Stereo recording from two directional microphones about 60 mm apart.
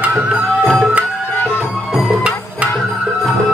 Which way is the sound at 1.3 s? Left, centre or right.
Left.